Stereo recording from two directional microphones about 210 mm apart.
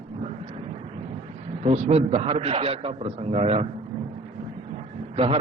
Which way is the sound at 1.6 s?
30° right (ahead or behind).